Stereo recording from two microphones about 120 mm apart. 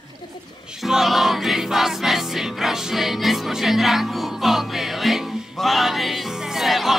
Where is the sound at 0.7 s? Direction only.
5° right (ahead or behind).